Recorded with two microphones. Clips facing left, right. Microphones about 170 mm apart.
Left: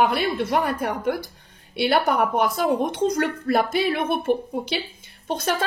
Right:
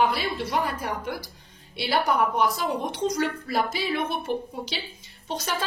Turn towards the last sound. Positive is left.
turn(degrees=55)  # may be behind; listen again after turning